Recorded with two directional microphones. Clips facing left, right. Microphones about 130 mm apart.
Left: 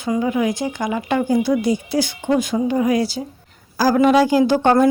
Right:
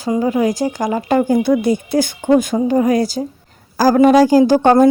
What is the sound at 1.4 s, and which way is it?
A woman's voice, 55° right (ahead or behind).